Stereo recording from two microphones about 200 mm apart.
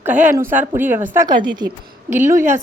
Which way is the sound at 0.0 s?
10° right (ahead or behind).